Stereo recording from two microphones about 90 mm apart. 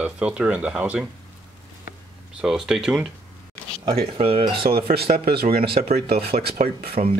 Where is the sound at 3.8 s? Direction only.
85° right.